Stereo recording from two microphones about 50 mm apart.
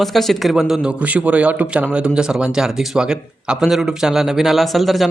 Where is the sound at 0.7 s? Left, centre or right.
Right.